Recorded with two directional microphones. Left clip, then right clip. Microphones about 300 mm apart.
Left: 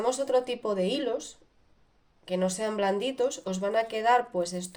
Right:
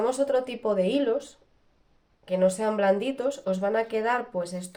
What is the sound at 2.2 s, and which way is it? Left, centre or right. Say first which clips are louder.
Speech: right 5 dB; left.